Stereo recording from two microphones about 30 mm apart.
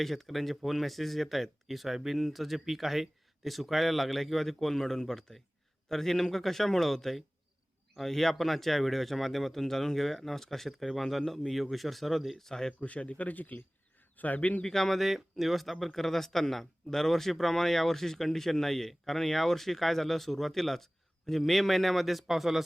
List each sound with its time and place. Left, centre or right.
0.0 s speech: centre
12.5 s speech: centre
12.8 s speech: left
14.2 s speech: left
14.6 s speech: centre
14.9 s speech: centre